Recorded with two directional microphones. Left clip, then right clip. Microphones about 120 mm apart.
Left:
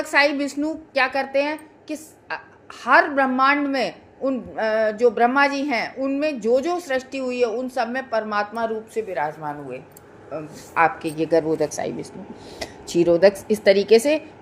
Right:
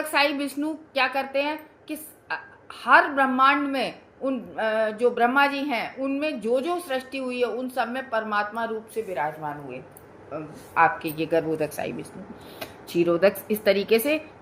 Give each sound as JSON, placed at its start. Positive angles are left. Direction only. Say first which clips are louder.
{"t": 0.1, "sound": "a woman's voice", "louder": "left 5 dB", "side_deg": 60}
{"t": 10.3, "sound": "a woman's voice", "louder": "left 1 dB", "side_deg": 85}